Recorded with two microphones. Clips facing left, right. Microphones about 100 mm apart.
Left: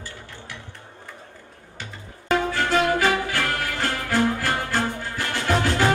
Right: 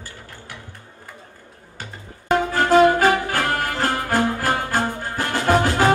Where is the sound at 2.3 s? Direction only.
40° right (ahead or behind).